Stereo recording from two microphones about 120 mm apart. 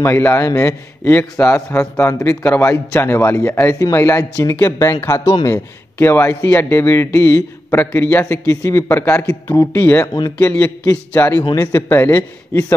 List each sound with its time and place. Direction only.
0.0 s a man's voice: 20° left (ahead or behind)
5.9 s a man's voice: 20° left (ahead or behind)